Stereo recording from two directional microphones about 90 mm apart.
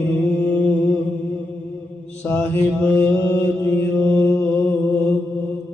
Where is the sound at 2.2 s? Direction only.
15° left (ahead or behind).